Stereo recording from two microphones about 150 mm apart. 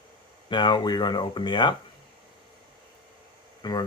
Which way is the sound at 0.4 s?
30° left (ahead or behind).